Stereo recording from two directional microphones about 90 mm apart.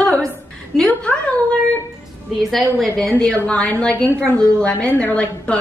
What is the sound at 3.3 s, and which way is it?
A woman's voice, 15° left (ahead or behind).